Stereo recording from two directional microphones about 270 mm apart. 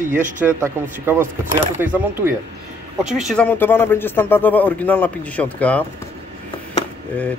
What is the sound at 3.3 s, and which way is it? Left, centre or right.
A man's voice, centre.